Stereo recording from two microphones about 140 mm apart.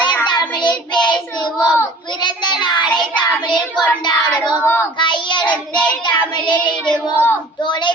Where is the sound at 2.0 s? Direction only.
35° left (ahead or behind).